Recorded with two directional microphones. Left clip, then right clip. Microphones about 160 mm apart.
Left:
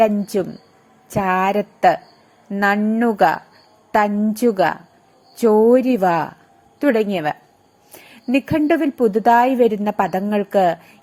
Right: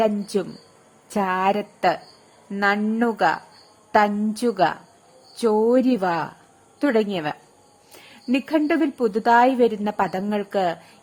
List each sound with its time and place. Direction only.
0.0 s a woman's voice: 20° left (ahead or behind)